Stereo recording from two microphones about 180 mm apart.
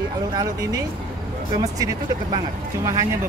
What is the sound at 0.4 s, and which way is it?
Speech, 20° right (ahead or behind).